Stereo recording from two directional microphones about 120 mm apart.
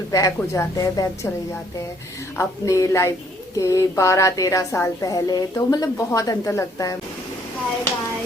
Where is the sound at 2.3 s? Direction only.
25° left (ahead or behind).